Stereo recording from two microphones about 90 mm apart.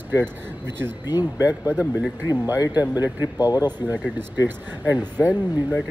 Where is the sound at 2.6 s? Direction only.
45° left (ahead or behind).